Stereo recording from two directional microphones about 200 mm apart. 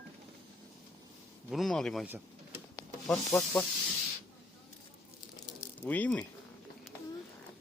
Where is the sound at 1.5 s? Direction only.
Centre (ahead or behind).